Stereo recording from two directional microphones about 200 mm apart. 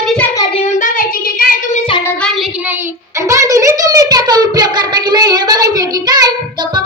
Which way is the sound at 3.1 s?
15° right (ahead or behind).